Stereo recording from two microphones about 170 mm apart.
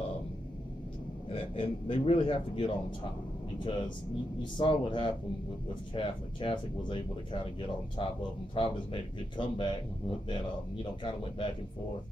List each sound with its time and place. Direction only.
1.3 s a man's voice: 35° left (ahead or behind)
4.4 s speech: 30° left (ahead or behind)
8.0 s speech: 30° left (ahead or behind)